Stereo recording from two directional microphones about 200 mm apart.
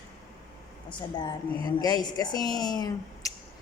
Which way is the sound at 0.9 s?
20° left (ahead or behind).